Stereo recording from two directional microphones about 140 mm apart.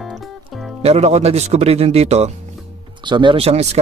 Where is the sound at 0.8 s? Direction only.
50° right (ahead or behind).